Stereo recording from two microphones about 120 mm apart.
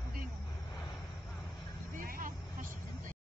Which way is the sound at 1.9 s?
90° right.